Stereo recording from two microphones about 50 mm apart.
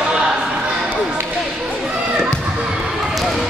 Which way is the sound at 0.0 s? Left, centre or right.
Centre.